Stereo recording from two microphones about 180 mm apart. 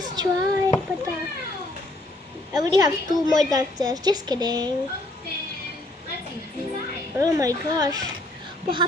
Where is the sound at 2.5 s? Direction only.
20° right (ahead or behind).